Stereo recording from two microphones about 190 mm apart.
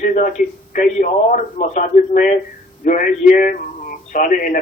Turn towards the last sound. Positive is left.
turn(degrees=45)  # may be behind; listen again after turning